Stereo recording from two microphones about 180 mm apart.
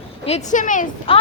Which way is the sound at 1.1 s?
30° left (ahead or behind).